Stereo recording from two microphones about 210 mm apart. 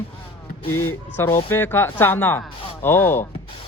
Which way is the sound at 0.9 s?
10° left (ahead or behind).